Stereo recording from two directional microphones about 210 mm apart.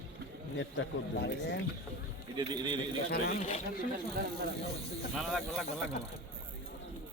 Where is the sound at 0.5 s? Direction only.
60° left (ahead or behind).